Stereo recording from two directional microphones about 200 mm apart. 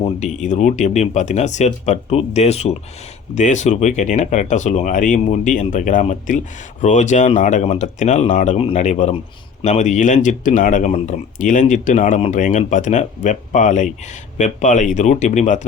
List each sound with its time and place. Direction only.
0.0 s speech: 35° left (ahead or behind)